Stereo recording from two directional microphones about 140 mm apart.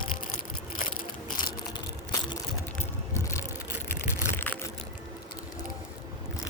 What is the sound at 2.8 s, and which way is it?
Vehicle, 20° left (ahead or behind).